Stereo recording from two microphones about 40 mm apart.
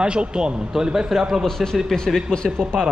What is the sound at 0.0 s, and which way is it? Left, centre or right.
A man's voice, right.